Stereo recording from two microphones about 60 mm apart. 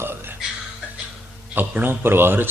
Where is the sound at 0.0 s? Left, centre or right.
Right.